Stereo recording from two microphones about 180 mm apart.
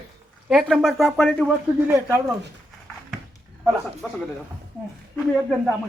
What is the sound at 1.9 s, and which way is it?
Speech, 15° right (ahead or behind).